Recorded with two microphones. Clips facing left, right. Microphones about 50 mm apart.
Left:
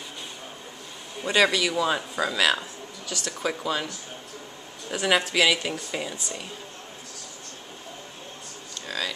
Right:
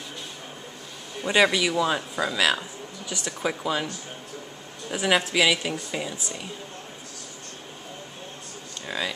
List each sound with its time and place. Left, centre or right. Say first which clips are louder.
1.3 s speech: right 1 dB; centre
1.7 s speech: right 1 dB; centre
3.1 s speech: even; centre
8.8 s a sound: right 1 dB; centre